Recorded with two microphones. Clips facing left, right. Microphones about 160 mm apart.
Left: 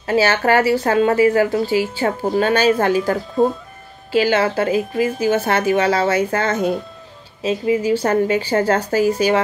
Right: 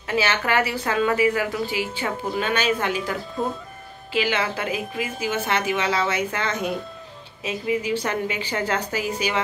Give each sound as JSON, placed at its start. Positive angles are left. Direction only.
{"t": 0.0, "sound": "speech", "side_deg": 35}
{"t": 5.4, "sound": "a woman's voice", "side_deg": 45}
{"t": 7.4, "sound": "speech", "side_deg": 30}
{"t": 8.0, "sound": "a woman's voice", "side_deg": 40}